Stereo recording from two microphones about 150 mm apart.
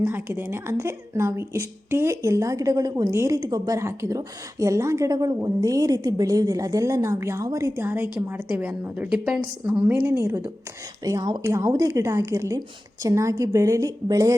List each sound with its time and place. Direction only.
0.0 s speech: 15° right (ahead or behind)